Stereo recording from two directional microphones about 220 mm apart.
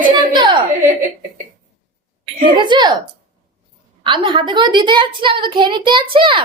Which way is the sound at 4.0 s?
20° right (ahead or behind).